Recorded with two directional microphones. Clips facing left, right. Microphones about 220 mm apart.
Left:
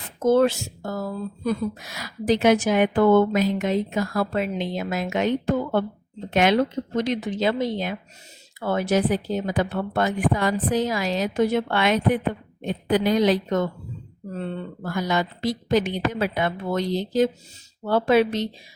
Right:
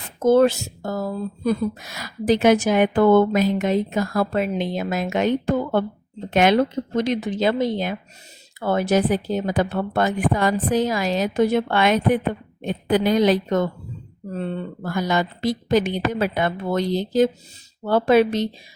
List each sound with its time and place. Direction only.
0.3 s speech: 40° right (ahead or behind)
6.3 s speech: 50° right (ahead or behind)
14.9 s speech: 50° right (ahead or behind)